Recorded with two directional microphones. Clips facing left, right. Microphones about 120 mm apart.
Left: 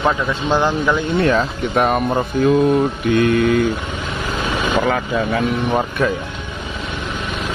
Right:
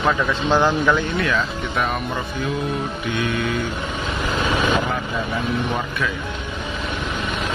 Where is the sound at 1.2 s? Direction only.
40° left (ahead or behind).